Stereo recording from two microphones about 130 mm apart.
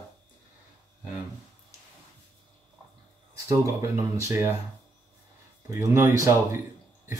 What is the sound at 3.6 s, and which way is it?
Speech, 25° right (ahead or behind).